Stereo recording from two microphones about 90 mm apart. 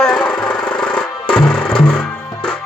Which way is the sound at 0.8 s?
10° left (ahead or behind).